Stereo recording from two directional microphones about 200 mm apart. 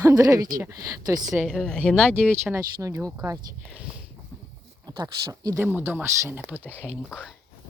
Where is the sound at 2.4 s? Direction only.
15° right (ahead or behind).